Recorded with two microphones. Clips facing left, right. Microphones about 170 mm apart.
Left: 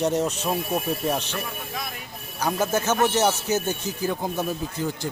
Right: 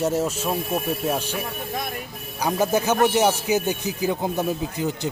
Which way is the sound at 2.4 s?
15° right (ahead or behind).